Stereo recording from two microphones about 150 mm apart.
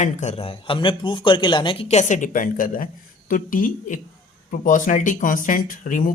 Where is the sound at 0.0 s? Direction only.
50° left (ahead or behind).